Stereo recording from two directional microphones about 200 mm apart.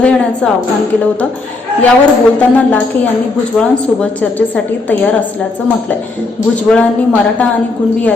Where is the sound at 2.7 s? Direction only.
5° left (ahead or behind).